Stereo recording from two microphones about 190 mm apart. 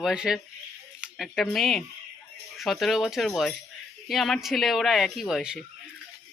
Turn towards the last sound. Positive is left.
turn(degrees=0)  # may be behind; listen again after turning